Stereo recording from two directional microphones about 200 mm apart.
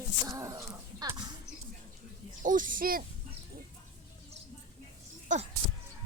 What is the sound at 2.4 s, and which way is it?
Speech, 40° right (ahead or behind).